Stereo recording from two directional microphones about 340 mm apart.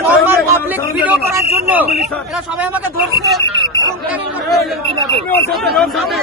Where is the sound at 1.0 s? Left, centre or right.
Centre.